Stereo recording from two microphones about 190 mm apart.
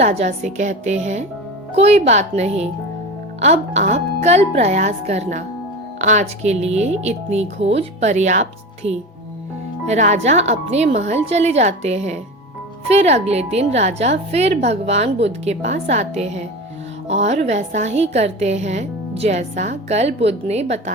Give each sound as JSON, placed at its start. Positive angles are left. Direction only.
{"t": 0.0, "sound": "a woman's voice", "side_deg": -35}